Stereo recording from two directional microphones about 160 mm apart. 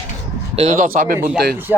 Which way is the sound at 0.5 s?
40° right (ahead or behind).